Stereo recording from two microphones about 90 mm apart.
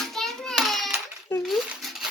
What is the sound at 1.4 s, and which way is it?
Crumpling, centre (ahead or behind).